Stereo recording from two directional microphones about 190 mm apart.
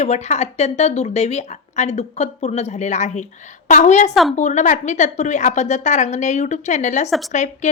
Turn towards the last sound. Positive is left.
turn(degrees=40)  # may be behind; listen again after turning